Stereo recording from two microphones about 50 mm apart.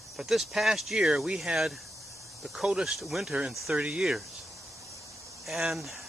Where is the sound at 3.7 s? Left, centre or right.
Right.